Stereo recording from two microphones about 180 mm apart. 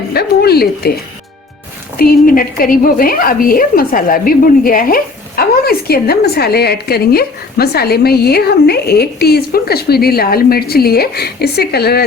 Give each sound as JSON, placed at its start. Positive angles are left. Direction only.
{"t": 0.1, "sound": "a woman's voice", "side_deg": 60}
{"t": 2.0, "sound": "a woman's voice", "side_deg": 55}